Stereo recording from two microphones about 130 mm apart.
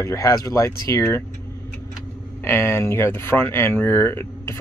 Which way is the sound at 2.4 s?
20° left (ahead or behind).